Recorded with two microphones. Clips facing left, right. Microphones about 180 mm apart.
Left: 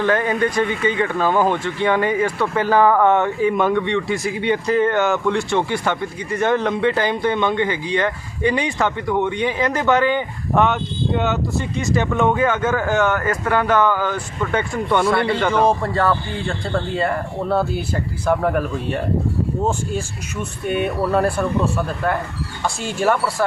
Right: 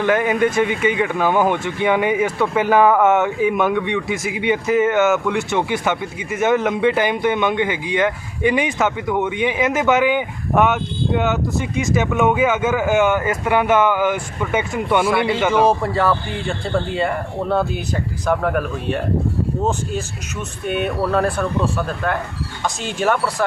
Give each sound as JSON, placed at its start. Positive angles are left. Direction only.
{"t": 0.0, "sound": "speech", "side_deg": -15}
{"t": 14.8, "sound": "speech", "side_deg": -5}
{"t": 19.6, "sound": "speech", "side_deg": 10}